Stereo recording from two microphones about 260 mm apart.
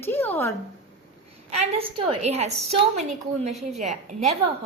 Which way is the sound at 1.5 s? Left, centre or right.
Right.